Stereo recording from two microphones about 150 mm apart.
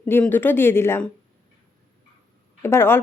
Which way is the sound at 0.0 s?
15° left (ahead or behind).